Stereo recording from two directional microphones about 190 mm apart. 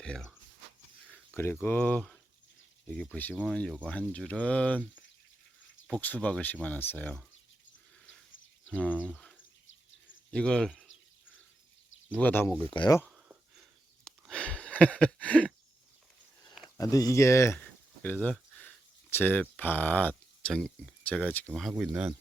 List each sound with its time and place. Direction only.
0.0 s speech: 5° left (ahead or behind)
1.1 s a sound: 10° left (ahead or behind)
1.6 s speech: 10° left (ahead or behind)
8.7 s speech: 10° left (ahead or behind)
10.3 s speech: 5° left (ahead or behind)
12.2 s speech: 10° left (ahead or behind)
12.7 s speech: 25° left (ahead or behind)
13.1 s a sound: 5° right (ahead or behind)
16.6 s a sound: 20° left (ahead or behind)
19.1 s speech: 10° left (ahead or behind)